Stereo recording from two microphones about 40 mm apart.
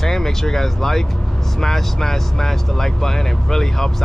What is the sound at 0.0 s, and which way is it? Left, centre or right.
Speech, centre.